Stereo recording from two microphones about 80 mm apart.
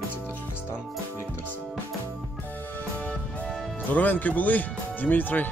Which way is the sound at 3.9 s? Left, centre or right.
Left.